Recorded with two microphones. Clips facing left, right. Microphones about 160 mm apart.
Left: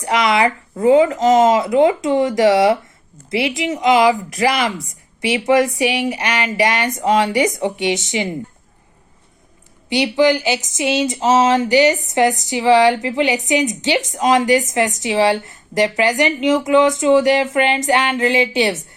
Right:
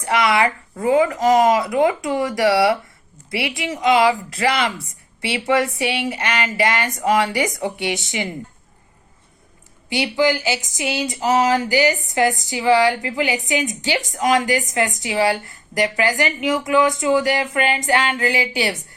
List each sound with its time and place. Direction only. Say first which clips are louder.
0.0 s speech: left 2 dB; 20° left (ahead or behind)
9.9 s speech: left 4 dB; 20° left (ahead or behind)